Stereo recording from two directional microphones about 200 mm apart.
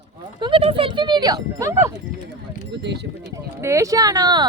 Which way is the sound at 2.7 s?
60° right (ahead or behind).